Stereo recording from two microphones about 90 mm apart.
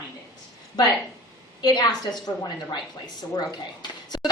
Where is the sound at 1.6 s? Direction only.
50° left (ahead or behind).